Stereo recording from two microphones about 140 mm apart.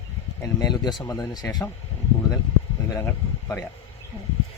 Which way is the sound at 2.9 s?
20° left (ahead or behind).